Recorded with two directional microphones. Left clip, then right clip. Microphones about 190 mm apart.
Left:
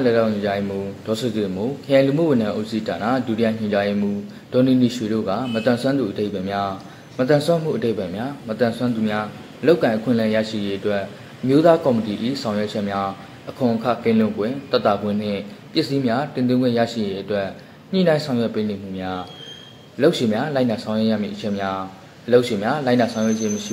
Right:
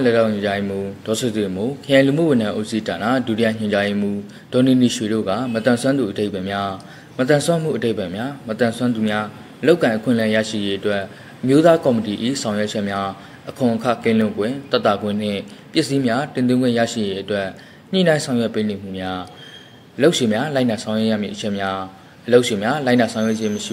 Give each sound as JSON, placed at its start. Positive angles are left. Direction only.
{"t": 0.0, "sound": "a man's voice", "side_deg": -35}